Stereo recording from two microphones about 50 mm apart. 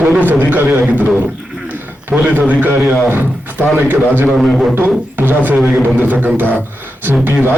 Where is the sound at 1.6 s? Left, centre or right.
Right.